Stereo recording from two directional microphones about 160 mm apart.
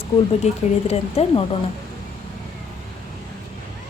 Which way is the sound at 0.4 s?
40° left (ahead or behind).